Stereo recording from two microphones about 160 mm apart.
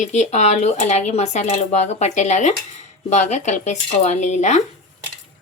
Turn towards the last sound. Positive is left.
turn(degrees=45)  # may be behind; listen again after turning